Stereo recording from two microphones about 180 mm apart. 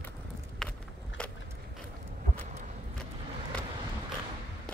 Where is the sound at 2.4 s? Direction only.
40° right (ahead or behind).